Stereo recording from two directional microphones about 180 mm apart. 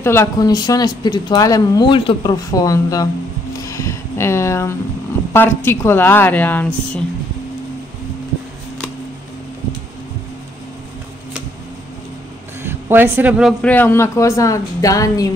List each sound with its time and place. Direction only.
0.0 s speech: 15° left (ahead or behind)
3.6 s a sound: 15° left (ahead or behind)
5.3 s speech: 10° left (ahead or behind)
12.6 s speech: 15° right (ahead or behind); by 15.2 s 20° left (ahead or behind)